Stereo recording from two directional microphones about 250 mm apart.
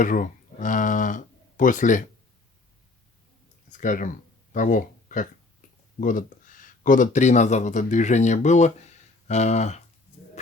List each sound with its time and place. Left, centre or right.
0.0 s speech: left
3.7 s a sound: left
6.0 s speech: left
10.4 s music: left